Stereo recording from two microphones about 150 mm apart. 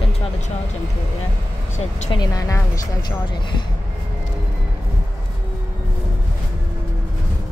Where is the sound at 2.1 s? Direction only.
25° left (ahead or behind).